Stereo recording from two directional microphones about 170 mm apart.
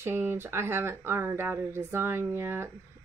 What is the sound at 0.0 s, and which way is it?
Speech, 15° right (ahead or behind).